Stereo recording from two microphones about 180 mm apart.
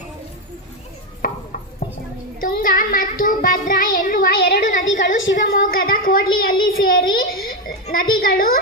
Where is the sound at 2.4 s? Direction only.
50° left (ahead or behind); by 4.9 s 65° left (ahead or behind).